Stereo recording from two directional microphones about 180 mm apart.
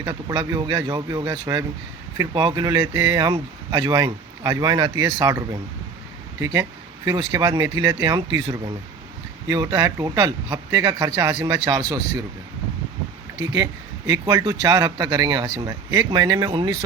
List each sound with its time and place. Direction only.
0.0 s speech: 25° right (ahead or behind)
9.5 s speech: 20° right (ahead or behind)
13.4 s speech: 20° right (ahead or behind)